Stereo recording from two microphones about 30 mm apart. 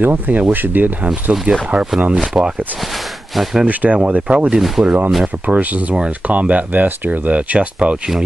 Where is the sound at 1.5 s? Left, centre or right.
Right.